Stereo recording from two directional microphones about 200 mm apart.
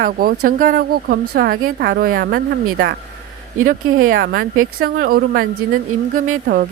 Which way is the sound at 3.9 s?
90° right.